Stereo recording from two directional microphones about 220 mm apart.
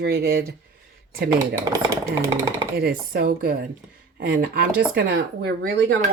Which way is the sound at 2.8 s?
40° right (ahead or behind).